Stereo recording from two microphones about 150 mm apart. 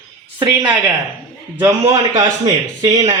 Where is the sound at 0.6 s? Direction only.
10° right (ahead or behind).